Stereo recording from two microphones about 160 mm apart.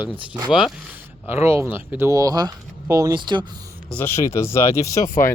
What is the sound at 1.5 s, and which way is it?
Speech, 15° right (ahead or behind).